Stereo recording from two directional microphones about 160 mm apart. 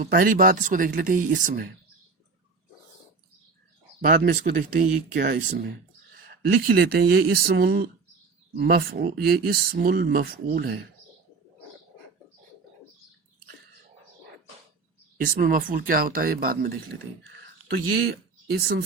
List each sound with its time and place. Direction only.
0.0 s speech: 60° right (ahead or behind)
4.0 s speech: 60° right (ahead or behind); by 5.7 s 85° right
6.5 s speech: 70° right (ahead or behind); by 7.9 s 85° right
8.5 s speech: 75° right (ahead or behind)
15.2 s speech: 60° right (ahead or behind)
17.9 s speech: 75° right (ahead or behind)